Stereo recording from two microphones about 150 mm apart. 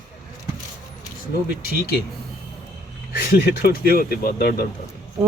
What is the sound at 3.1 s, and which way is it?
Speech, 90° left.